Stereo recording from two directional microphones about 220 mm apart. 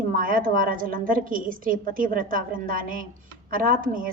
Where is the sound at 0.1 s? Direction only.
40° right (ahead or behind).